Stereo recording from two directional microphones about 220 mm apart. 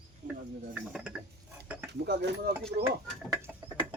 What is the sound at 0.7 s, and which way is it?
Mechanisms, 5° right (ahead or behind).